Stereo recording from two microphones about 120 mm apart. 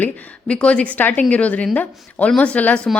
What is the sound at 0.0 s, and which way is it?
Speech, 15° left (ahead or behind).